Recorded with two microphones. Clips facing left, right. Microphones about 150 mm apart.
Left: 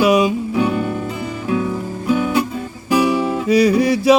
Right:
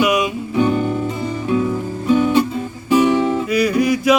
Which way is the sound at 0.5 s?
5° left (ahead or behind).